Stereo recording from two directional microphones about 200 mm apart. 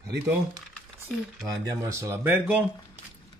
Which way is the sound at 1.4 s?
15° right (ahead or behind).